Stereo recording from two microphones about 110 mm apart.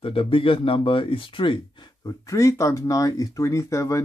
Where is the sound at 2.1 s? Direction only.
30° left (ahead or behind).